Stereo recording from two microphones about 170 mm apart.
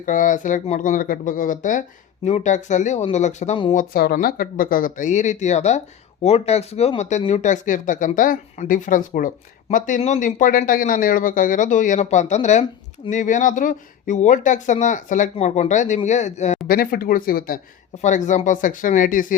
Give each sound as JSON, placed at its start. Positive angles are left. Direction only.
{"t": 0.0, "sound": "speech", "side_deg": 50}
{"t": 3.8, "sound": "speech", "side_deg": 60}
{"t": 16.6, "sound": "speech", "side_deg": 55}
{"t": 17.9, "sound": "speech", "side_deg": 45}